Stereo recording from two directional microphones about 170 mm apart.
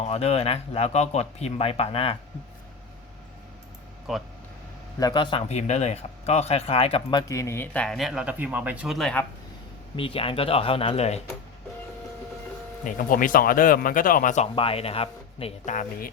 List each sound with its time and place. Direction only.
0.0 s speech: 40° left (ahead or behind)
4.1 s speech: centre (ahead or behind)
4.9 s speech: 25° left (ahead or behind); by 9.2 s 5° left (ahead or behind)
9.9 s speech: 30° left (ahead or behind)
12.8 s speech: 50° left (ahead or behind)
14.5 s speech: 35° left (ahead or behind); by 16.0 s 50° left (ahead or behind)